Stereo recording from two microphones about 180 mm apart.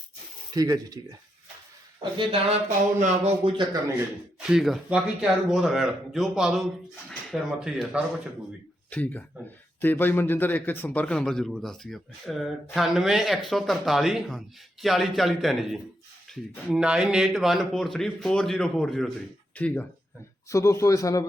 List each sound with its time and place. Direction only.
0.5 s speech: 20° right (ahead or behind)
2.0 s speech: 25° right (ahead or behind)
2.6 s a sound: 45° right (ahead or behind)
3.4 s speech: 25° right (ahead or behind)
4.4 s speech: 5° right (ahead or behind)
8.9 s speech: 10° left (ahead or behind)